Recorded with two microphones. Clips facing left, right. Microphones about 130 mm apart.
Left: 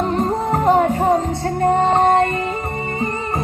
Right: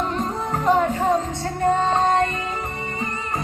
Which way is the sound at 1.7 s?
50° left (ahead or behind).